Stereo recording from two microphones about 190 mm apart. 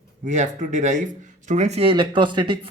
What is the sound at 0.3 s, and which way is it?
Speech, 40° right (ahead or behind).